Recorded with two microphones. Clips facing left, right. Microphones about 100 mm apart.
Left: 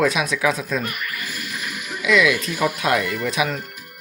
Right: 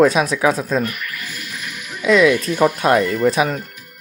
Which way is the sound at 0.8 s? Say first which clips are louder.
Right 1 dB; centre (ahead or behind).